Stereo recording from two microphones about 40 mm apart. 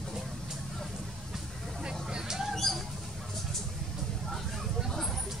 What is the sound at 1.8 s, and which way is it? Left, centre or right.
Vehicle, right.